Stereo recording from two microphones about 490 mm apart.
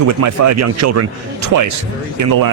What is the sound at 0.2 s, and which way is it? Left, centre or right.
Speech, right.